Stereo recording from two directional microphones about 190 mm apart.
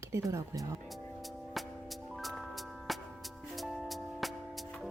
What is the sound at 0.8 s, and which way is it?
Music, centre (ahead or behind).